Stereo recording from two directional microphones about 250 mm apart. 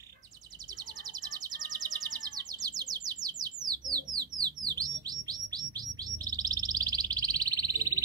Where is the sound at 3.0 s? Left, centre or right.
Centre.